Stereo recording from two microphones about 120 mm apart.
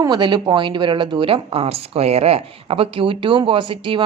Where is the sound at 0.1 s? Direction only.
40° right (ahead or behind).